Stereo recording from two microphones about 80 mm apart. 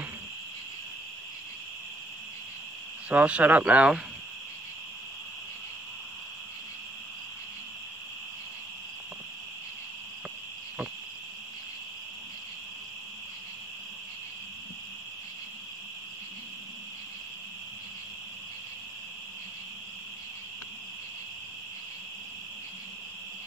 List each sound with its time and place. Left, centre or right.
3.1 s speech: centre